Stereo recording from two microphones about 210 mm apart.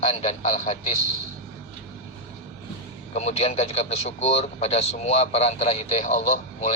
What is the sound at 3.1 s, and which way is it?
A man's voice, 30° left (ahead or behind).